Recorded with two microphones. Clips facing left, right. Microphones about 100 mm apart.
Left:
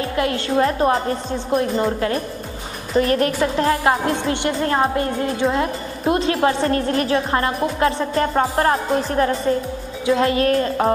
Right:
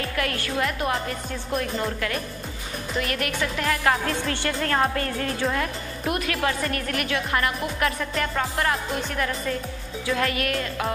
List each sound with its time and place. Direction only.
0.0 s speech: 25° left (ahead or behind)